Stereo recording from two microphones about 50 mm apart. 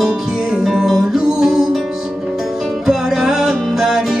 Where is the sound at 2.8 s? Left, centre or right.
Centre.